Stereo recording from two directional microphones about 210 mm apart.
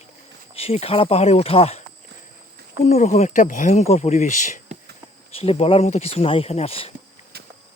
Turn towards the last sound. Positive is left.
turn(degrees=25)  # may be behind; listen again after turning